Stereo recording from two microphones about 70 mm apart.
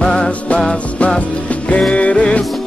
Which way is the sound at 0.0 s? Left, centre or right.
Centre.